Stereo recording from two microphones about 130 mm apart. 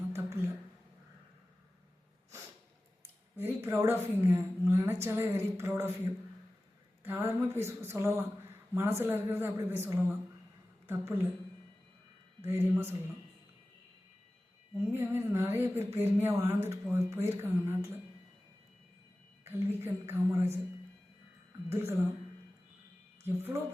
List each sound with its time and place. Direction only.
0.1 s a sound: 20° right (ahead or behind)
3.3 s speech: 20° right (ahead or behind)
7.0 s speech: 20° right (ahead or behind)
12.4 s speech: 15° right (ahead or behind)
14.9 s speech: 15° right (ahead or behind)
19.5 s speech: 20° right (ahead or behind)
21.7 s speech: 20° right (ahead or behind)
23.2 s speech: 20° right (ahead or behind)